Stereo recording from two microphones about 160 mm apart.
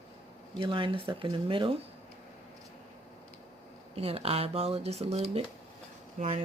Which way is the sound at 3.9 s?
35° right (ahead or behind).